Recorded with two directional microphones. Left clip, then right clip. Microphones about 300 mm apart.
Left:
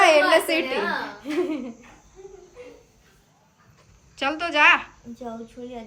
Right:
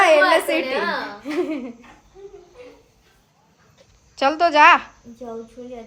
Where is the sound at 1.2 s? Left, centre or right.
Centre.